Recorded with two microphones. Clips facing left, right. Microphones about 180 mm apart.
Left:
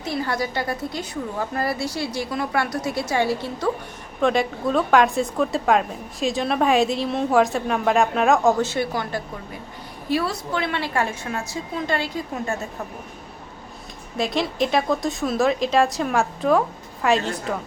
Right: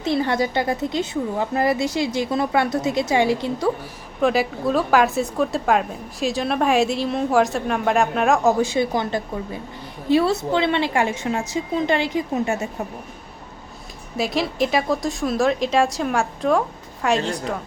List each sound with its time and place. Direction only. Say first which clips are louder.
0.0 s a woman's voice: right 5 dB; 25° right (ahead or behind)
4.2 s a woman's voice: right 1 dB; 5° right (ahead or behind)
8.5 s a woman's voice: right 3 dB; 15° right (ahead or behind)
14.2 s a woman's voice: right 1 dB; centre (ahead or behind)